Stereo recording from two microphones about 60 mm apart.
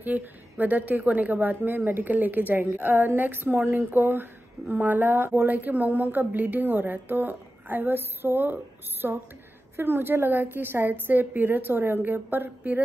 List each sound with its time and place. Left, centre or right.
0.0 s a woman's voice: right